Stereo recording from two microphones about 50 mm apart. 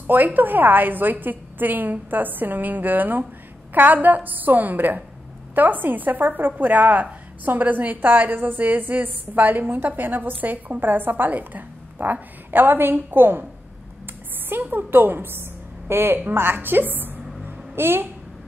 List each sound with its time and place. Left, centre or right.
0.0 s a woman's voice: right
14.5 s a woman's voice: right
16.3 s a sound: right